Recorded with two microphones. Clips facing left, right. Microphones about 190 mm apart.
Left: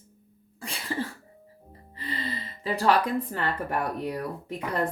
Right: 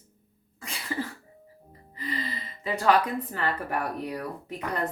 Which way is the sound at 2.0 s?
30° left (ahead or behind).